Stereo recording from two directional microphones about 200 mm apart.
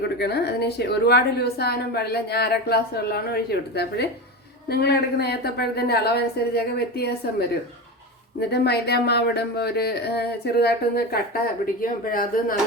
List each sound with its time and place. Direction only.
0.2 s a woman's voice: 55° left (ahead or behind)